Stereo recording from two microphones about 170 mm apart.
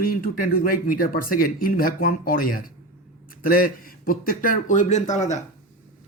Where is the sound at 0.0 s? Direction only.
60° left (ahead or behind).